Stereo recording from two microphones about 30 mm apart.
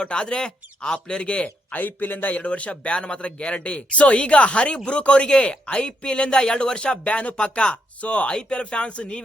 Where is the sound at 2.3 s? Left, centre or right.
Left.